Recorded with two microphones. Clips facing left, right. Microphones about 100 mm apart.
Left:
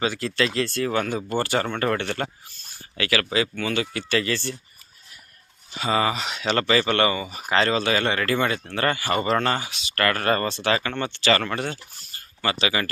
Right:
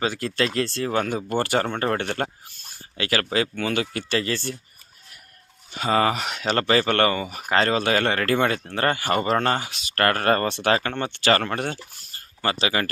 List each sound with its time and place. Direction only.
0.0 s speech: 40° right (ahead or behind)
0.7 s speech: 30° right (ahead or behind)
1.1 s speech: 50° right (ahead or behind)
1.7 s speech: 30° right (ahead or behind)
2.0 s speech: 45° right (ahead or behind)
4.1 s speech: 35° right (ahead or behind)
5.7 s speech: 50° right (ahead or behind)
6.4 s speech: 40° right (ahead or behind); by 7.4 s 55° right (ahead or behind)
7.5 s speech: 45° right (ahead or behind)
8.6 s speech: 35° right (ahead or behind)
12.1 s a sound: 40° right (ahead or behind)